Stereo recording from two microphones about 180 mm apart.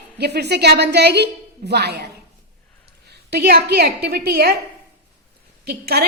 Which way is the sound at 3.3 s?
60° right (ahead or behind).